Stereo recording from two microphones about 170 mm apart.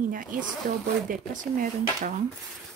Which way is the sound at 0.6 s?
60° right (ahead or behind).